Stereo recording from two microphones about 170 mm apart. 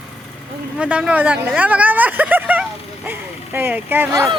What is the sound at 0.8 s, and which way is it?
Speech, 5° right (ahead or behind).